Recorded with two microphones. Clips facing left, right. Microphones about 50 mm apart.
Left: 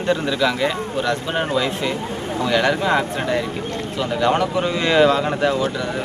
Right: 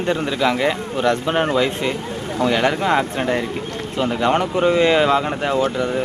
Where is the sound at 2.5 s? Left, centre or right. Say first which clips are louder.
Even; right.